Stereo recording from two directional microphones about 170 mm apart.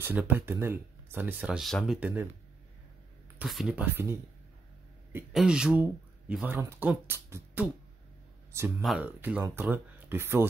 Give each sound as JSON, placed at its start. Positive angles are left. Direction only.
{"t": 0.0, "sound": "speech", "side_deg": -10}
{"t": 3.3, "sound": "speech", "side_deg": -5}
{"t": 5.3, "sound": "speech", "side_deg": -5}
{"t": 8.8, "sound": "speech", "side_deg": -5}